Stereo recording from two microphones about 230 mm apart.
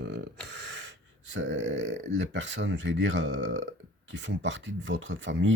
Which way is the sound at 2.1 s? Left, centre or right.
Right.